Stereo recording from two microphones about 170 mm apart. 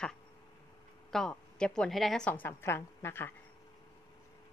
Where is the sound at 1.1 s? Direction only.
5° left (ahead or behind).